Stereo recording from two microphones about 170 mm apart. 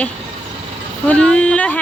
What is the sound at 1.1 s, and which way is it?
Speech, 5° left (ahead or behind).